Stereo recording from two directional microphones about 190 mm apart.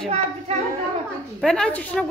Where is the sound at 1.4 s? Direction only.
5° left (ahead or behind).